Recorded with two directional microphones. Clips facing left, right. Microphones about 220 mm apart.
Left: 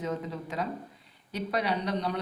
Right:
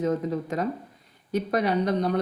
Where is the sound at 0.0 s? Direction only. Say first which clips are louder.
Right 8 dB; 45° right (ahead or behind).